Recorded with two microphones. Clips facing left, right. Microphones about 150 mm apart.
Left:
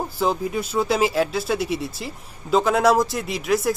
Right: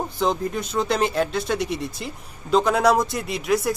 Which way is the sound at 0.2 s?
5° left (ahead or behind).